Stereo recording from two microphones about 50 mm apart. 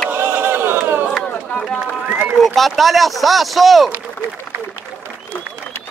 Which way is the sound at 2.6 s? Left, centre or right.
Centre.